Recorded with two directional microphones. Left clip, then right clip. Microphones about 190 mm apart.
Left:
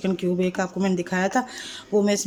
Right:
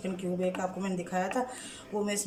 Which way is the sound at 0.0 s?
55° left (ahead or behind).